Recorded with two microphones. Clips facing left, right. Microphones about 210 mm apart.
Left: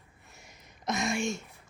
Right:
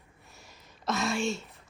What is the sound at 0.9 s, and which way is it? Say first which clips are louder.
Speech: right 1 dB; 15° left (ahead or behind).